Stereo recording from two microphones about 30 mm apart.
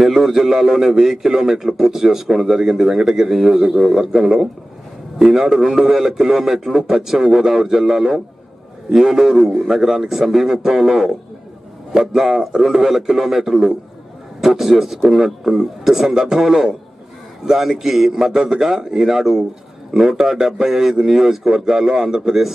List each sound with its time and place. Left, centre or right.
0.0 s a man's voice: centre